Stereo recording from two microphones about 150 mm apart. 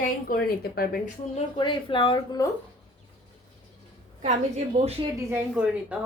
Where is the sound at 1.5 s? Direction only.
35° left (ahead or behind).